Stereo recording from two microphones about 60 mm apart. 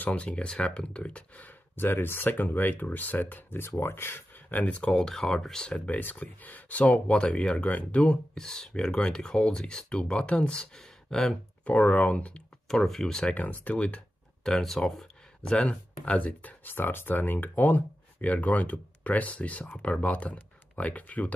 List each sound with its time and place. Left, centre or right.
0.0 s speech: left
1.9 s speech: left
4.9 s speech: centre
5.9 s speech: left; by 11.3 s centre
11.6 s speech: left
12.6 s speech: centre
13.3 s speech: left
14.4 s speech: centre
15.7 s speech: left